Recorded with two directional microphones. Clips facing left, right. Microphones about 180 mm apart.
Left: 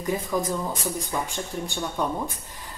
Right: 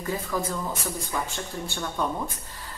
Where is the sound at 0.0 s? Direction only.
15° left (ahead or behind).